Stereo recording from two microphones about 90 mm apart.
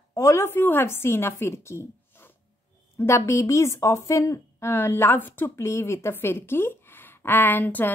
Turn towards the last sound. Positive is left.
turn(degrees=20)  # may be behind; listen again after turning